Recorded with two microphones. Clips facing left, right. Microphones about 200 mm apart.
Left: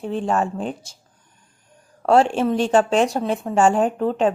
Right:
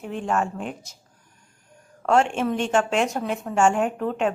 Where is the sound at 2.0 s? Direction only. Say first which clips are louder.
Left 4 dB; 35° left (ahead or behind).